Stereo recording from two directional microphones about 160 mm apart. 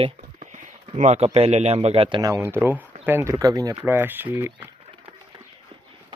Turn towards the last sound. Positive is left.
turn(degrees=-15)  # may be behind; listen again after turning